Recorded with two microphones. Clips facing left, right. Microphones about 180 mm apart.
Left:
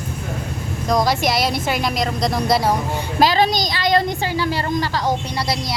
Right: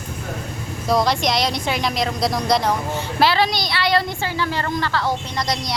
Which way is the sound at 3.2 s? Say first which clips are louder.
Left 2 dB; 40° left (ahead or behind).